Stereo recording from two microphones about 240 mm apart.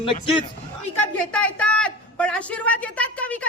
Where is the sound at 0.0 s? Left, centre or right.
Left.